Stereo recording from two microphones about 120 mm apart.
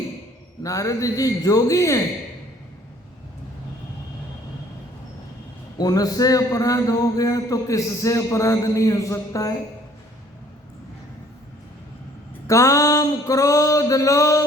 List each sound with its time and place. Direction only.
0.6 s a man's voice: 30° left (ahead or behind)
5.7 s a man's voice: 30° left (ahead or behind)
12.5 s a man's voice: 25° left (ahead or behind)